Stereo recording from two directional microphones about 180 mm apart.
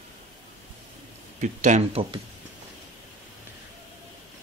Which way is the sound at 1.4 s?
40° right (ahead or behind).